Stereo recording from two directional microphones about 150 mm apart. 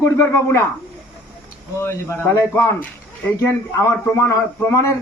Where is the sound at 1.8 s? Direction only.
15° left (ahead or behind).